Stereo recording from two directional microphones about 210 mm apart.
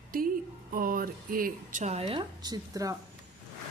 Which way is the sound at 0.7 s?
45° right (ahead or behind).